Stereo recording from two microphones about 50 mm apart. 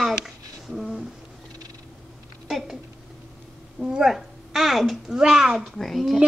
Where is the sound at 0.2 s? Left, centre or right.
Centre.